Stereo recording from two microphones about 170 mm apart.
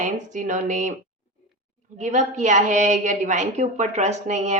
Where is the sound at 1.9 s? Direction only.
45° right (ahead or behind).